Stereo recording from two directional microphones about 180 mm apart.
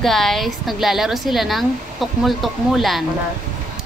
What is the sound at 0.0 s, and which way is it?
A woman's voice, centre (ahead or behind).